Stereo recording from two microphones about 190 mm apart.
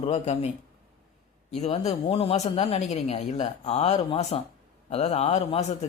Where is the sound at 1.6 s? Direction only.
35° left (ahead or behind).